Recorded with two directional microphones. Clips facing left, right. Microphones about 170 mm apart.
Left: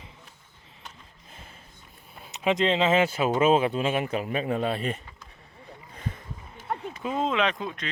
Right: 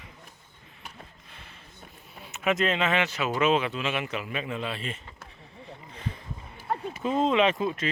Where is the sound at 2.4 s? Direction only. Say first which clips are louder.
Left 2 dB; 25° left (ahead or behind).